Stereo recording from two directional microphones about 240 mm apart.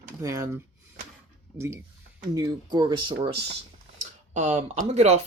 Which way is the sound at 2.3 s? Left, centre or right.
Centre.